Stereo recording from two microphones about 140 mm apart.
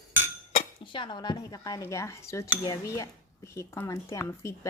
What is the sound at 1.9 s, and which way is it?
Cutlery, 20° left (ahead or behind).